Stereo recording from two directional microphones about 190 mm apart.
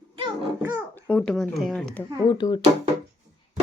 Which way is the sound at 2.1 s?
20° left (ahead or behind).